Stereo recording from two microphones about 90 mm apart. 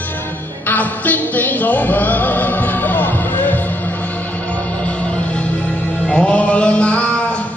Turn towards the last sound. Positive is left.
turn(degrees=15)  # may be behind; listen again after turning